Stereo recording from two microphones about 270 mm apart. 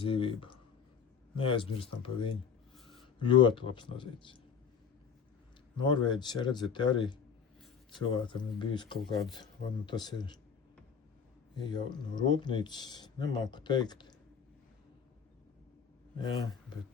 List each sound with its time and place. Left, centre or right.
0.0 s speech: centre
5.7 s speech: centre
11.5 s speech: centre